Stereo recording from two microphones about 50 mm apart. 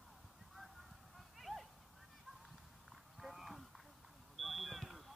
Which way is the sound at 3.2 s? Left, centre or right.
Centre.